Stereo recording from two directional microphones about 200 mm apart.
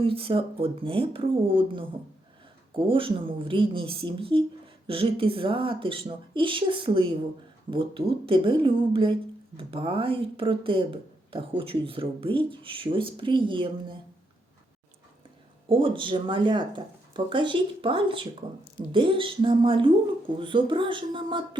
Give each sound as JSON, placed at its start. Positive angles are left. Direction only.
{"t": 0.0, "sound": "speech", "side_deg": -25}
{"t": 15.7, "sound": "speech", "side_deg": -25}